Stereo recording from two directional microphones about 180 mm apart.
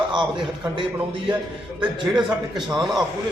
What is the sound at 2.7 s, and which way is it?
Speech, 20° right (ahead or behind).